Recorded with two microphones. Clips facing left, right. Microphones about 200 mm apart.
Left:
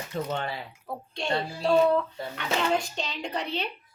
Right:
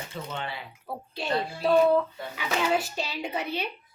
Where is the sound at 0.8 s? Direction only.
5° right (ahead or behind).